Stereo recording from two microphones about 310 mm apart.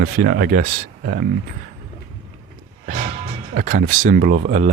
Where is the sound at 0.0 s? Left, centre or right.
Right.